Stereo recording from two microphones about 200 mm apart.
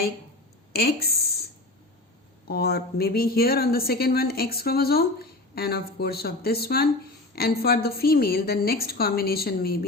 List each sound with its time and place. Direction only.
0.7 s speech: 50° left (ahead or behind)
2.5 s speech: 50° left (ahead or behind)